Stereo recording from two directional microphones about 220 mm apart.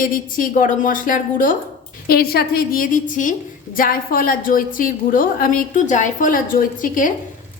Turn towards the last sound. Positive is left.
turn(degrees=40)  # may be behind; listen again after turning